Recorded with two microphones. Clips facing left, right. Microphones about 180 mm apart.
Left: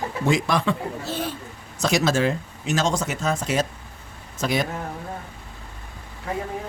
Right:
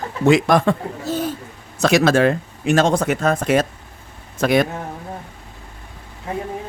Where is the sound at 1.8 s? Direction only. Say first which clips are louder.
Right 6 dB; 65° right (ahead or behind).